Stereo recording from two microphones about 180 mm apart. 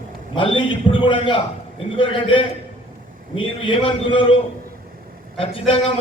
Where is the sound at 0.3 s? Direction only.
30° left (ahead or behind).